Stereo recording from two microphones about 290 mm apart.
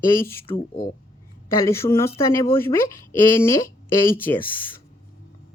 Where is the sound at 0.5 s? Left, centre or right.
Left.